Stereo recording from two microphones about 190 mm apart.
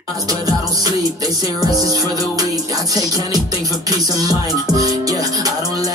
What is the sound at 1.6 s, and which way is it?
Music, 20° right (ahead or behind).